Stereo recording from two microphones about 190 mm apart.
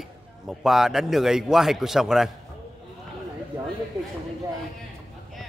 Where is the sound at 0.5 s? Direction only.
Centre (ahead or behind).